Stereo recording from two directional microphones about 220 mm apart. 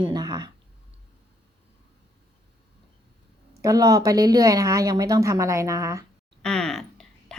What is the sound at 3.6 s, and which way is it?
Speech, 15° right (ahead or behind).